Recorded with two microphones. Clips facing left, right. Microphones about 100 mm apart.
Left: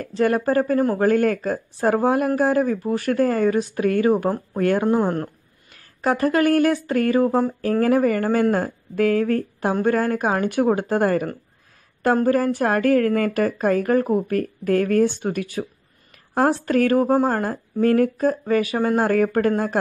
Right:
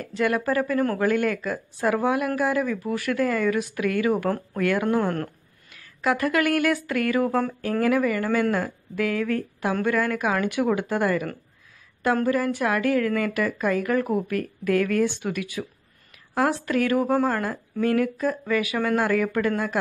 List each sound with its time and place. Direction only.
0.0 s speech: 35° left (ahead or behind)
5.7 s speech: 40° left (ahead or behind)